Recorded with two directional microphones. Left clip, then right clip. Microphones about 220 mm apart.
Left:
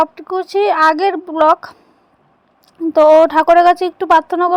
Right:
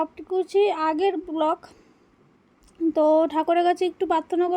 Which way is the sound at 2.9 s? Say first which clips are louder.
Left 12 dB; 15° left (ahead or behind).